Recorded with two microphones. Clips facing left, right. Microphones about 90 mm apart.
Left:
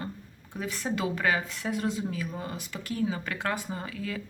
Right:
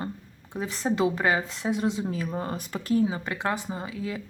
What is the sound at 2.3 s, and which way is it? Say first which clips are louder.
Speech: right 5 dB; 45° right (ahead or behind).